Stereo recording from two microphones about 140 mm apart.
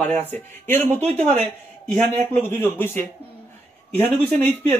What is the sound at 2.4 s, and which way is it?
Speech, 15° left (ahead or behind).